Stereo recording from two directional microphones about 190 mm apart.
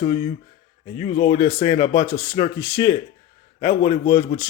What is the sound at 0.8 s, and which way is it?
Speech, 35° left (ahead or behind).